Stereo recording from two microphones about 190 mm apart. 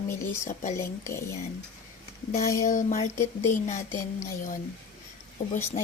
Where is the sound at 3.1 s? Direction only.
15° left (ahead or behind).